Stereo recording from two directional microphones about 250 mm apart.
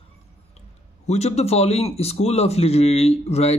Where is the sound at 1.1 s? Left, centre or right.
Left.